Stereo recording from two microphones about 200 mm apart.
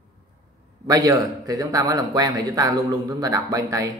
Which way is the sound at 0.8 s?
20° right (ahead or behind).